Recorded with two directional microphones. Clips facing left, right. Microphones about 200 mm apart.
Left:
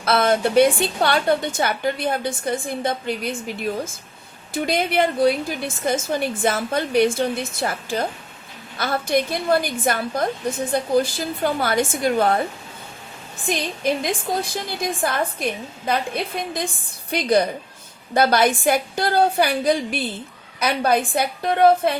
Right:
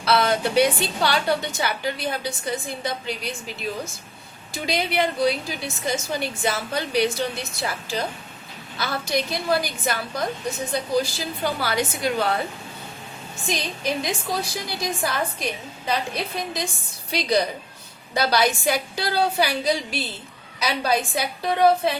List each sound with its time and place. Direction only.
0.0 s a woman's voice: 50° left (ahead or behind)
4.5 s a woman's voice: 55° left (ahead or behind)
13.5 s a woman's voice: 55° left (ahead or behind)